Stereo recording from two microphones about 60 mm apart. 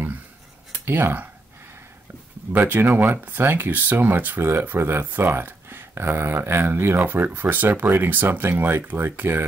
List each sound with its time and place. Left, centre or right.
0.8 s speech: right
2.5 s speech: right